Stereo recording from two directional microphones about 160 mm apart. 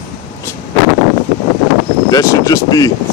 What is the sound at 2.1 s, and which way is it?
Speech, 20° left (ahead or behind).